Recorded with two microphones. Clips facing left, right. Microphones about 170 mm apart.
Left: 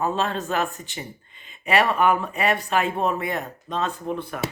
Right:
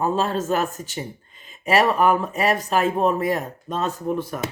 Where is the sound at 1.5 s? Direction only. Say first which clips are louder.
Right 2 dB; 40° right (ahead or behind).